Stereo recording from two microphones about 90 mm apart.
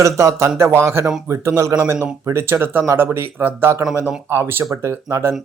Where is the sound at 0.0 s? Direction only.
35° right (ahead or behind).